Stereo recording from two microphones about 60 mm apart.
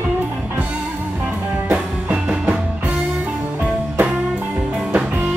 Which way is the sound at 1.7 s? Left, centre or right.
Centre.